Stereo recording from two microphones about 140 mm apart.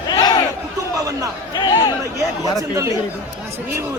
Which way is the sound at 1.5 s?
30° left (ahead or behind).